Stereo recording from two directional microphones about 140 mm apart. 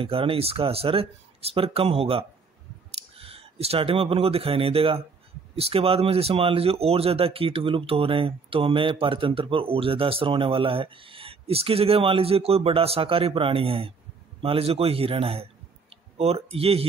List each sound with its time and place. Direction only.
0.0 s speech: 40° right (ahead or behind)